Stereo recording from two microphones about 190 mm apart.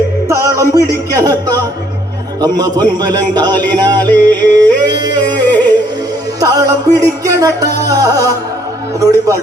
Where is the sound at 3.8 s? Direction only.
20° right (ahead or behind).